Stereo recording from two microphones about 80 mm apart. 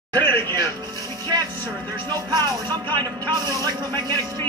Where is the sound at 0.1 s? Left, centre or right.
Left.